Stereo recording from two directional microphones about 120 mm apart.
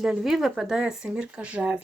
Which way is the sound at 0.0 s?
5° right (ahead or behind).